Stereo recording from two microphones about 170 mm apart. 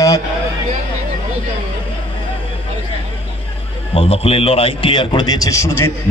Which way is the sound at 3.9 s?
35° left (ahead or behind).